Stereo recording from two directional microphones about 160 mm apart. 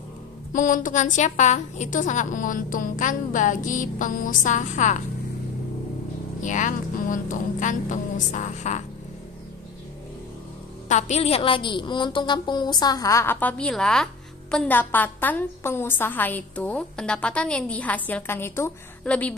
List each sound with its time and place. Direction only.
0.5 s a woman's voice: 55° left (ahead or behind)
6.4 s a woman's voice: 50° left (ahead or behind)
10.9 s a woman's voice: 45° left (ahead or behind); by 19.3 s 10° left (ahead or behind)